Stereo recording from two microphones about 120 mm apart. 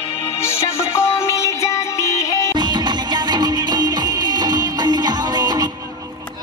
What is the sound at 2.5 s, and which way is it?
Music, 40° right (ahead or behind).